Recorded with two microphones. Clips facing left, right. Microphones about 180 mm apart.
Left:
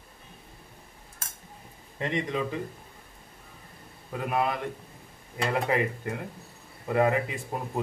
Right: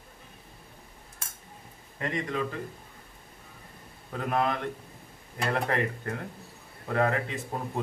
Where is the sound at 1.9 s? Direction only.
20° left (ahead or behind).